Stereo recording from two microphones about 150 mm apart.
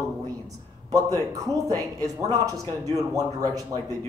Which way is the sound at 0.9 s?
20° right (ahead or behind).